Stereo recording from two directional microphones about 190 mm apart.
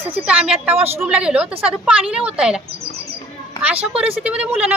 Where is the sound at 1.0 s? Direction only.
5° right (ahead or behind).